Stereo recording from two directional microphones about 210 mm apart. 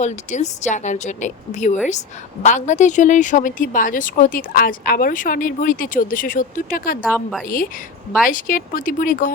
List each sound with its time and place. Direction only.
0.0 s speech: 35° left (ahead or behind)
7.1 s a woman's voice: centre (ahead or behind)
7.4 s speech: 40° left (ahead or behind)